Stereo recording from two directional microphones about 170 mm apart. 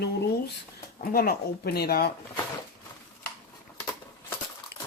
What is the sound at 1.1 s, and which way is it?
Speech, 60° left (ahead or behind).